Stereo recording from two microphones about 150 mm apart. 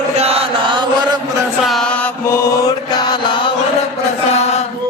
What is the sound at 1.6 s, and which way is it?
Mantra, centre (ahead or behind).